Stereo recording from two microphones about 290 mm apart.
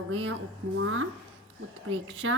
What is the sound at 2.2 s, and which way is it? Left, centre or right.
Speech, right.